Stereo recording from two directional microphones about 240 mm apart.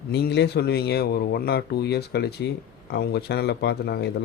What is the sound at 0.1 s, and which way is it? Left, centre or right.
A man's voice, left.